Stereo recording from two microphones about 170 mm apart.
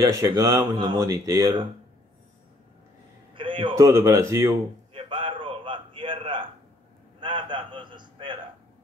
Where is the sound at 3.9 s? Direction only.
20° right (ahead or behind).